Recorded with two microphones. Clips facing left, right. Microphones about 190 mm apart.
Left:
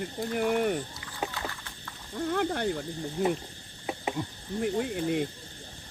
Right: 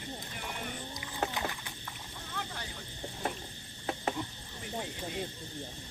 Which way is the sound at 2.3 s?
55° left (ahead or behind).